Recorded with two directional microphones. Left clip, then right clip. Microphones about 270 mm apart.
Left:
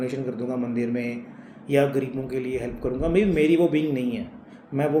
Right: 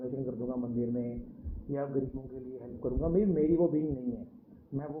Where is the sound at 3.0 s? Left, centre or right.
Left.